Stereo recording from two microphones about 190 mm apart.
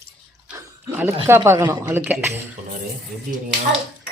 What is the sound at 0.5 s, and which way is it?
Speech, 10° right (ahead or behind).